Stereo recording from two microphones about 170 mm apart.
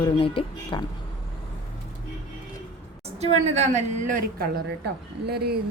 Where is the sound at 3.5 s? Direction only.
45° right (ahead or behind).